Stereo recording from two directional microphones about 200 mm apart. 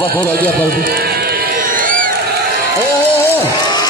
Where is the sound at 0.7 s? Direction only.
45° right (ahead or behind).